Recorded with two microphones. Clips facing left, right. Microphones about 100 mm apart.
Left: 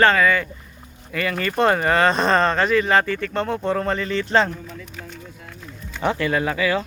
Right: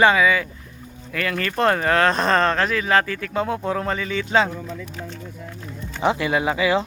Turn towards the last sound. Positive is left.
turn(degrees=-15)  # may be behind; listen again after turning